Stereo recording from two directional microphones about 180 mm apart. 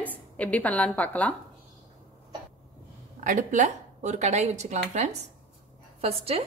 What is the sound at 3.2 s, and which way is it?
A woman's voice, 45° right (ahead or behind).